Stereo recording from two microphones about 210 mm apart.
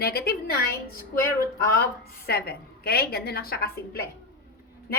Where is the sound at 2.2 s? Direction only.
45° left (ahead or behind).